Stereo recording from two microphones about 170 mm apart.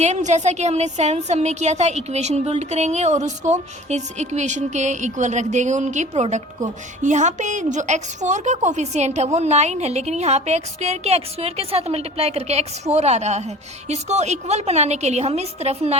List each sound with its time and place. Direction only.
0.0 s a woman's voice: 45° right (ahead or behind)